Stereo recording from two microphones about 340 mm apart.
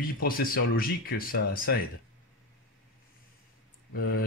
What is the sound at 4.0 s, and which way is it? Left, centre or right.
Speech, left.